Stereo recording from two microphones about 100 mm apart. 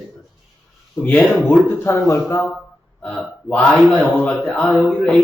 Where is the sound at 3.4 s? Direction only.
10° left (ahead or behind).